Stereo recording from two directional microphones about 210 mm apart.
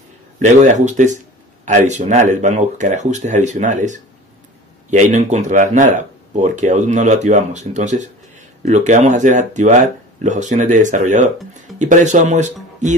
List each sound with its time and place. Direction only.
0.4 s speech: 35° right (ahead or behind)